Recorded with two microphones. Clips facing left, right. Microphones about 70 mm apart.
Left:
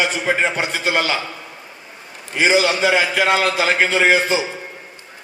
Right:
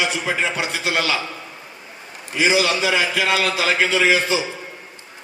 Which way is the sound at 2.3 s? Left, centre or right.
Left.